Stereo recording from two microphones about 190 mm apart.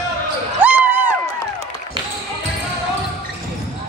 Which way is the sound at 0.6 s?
10° right (ahead or behind).